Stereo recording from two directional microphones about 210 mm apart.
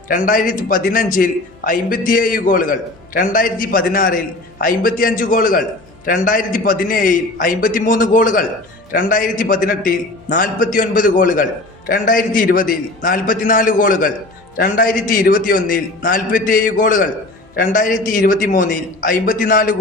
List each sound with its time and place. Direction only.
0.1 s a man's voice: 40° left (ahead or behind)